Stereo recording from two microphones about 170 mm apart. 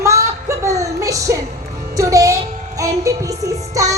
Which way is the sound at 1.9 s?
20° right (ahead or behind).